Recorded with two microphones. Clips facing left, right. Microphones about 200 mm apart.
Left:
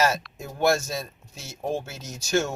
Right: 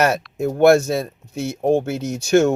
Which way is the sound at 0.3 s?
60° right (ahead or behind).